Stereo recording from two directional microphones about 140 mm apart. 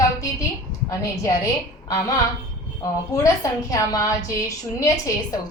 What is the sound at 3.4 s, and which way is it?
A woman's voice, 25° left (ahead or behind).